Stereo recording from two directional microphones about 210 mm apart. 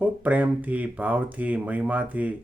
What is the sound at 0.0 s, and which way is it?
Speech, 5° right (ahead or behind).